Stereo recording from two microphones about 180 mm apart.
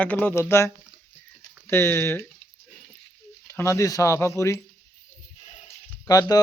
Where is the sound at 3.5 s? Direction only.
15° left (ahead or behind).